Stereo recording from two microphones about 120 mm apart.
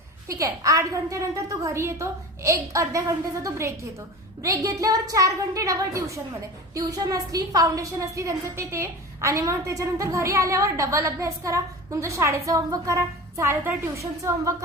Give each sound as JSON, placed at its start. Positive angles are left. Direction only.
{"t": 0.3, "sound": "a woman's voice", "side_deg": -25}